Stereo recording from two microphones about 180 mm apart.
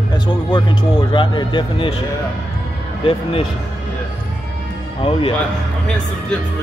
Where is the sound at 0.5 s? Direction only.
25° left (ahead or behind).